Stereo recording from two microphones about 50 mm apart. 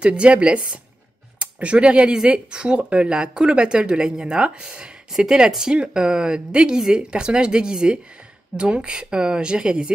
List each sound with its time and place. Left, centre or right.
0.0 s speech: right